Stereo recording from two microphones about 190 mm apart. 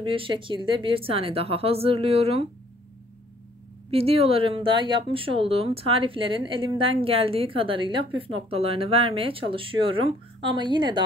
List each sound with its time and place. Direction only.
0.0 s speech: 25° right (ahead or behind)
3.9 s speech: 30° right (ahead or behind)